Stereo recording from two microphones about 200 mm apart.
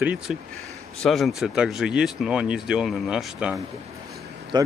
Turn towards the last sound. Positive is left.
turn(degrees=-20)  # may be behind; listen again after turning